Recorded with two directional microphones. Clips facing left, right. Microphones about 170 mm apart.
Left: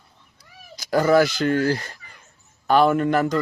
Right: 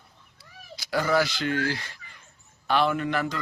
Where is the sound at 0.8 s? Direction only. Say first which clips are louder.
Left 7 dB; 45° left (ahead or behind).